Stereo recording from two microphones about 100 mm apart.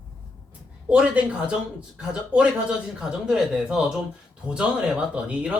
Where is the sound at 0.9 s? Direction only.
10° right (ahead or behind).